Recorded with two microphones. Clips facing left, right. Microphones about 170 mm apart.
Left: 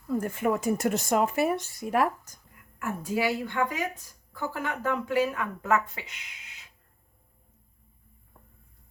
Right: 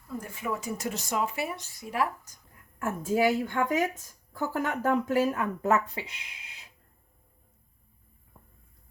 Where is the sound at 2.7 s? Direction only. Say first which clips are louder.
Right 3 dB; 45° right (ahead or behind).